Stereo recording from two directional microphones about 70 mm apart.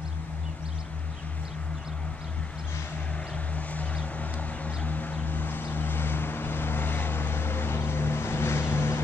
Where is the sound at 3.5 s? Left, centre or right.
Left.